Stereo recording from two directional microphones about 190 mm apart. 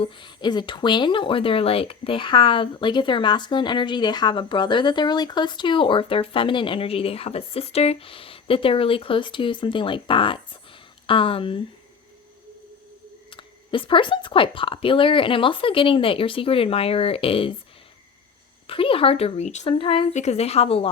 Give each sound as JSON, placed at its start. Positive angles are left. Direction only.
{"t": 0.0, "sound": "speech", "side_deg": 25}
{"t": 13.3, "sound": "speech", "side_deg": 25}
{"t": 18.7, "sound": "speech", "side_deg": 30}